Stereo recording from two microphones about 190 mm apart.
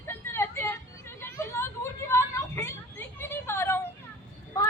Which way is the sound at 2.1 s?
15° left (ahead or behind).